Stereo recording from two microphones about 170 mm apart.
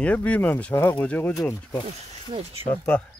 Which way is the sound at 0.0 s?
10° left (ahead or behind).